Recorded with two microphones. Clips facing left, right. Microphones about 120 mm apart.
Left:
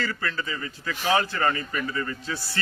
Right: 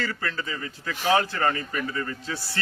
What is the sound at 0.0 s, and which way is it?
A man's voice, 40° right (ahead or behind).